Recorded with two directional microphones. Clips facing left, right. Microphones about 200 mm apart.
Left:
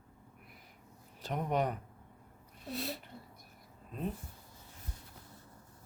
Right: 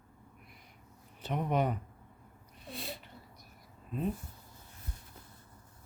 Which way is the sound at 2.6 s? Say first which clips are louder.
Left 4 dB; centre (ahead or behind).